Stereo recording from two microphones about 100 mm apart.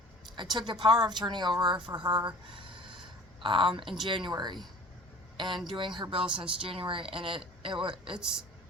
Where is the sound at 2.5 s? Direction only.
55° right (ahead or behind).